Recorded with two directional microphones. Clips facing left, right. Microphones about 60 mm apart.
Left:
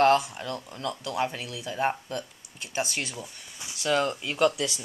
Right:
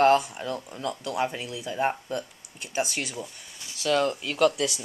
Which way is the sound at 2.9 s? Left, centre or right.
Centre.